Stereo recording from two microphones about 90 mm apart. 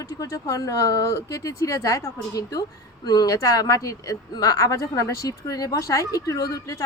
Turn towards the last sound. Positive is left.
turn(degrees=40)  # may be behind; listen again after turning